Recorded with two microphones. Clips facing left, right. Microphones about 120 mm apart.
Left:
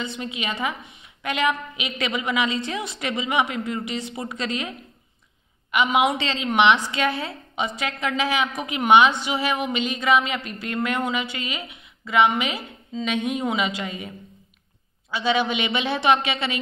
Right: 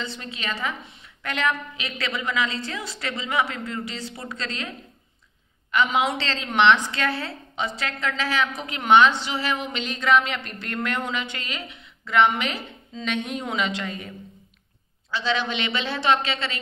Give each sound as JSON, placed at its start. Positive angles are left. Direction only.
{"t": 0.0, "sound": "a woman's voice", "side_deg": 15}